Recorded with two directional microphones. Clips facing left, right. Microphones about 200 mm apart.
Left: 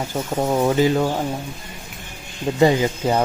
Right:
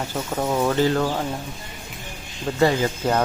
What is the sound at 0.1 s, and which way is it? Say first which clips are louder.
Speech: left 4 dB; 20° left (ahead or behind).